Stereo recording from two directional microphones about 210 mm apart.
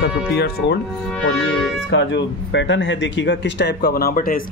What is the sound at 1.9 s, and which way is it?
Speech, 60° left (ahead or behind).